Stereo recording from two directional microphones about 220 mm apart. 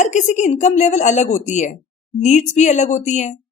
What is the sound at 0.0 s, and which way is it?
Speech, 35° left (ahead or behind).